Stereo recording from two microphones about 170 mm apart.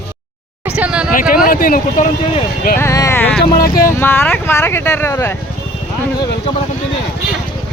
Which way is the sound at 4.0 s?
15° left (ahead or behind).